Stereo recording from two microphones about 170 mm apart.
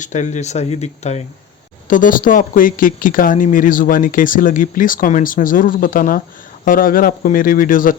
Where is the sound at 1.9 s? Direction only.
50° left (ahead or behind).